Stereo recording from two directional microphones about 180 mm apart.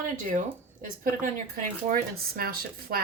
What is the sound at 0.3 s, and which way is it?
Speech, 45° right (ahead or behind).